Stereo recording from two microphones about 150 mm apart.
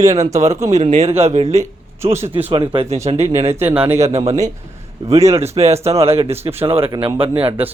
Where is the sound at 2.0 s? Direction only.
15° right (ahead or behind).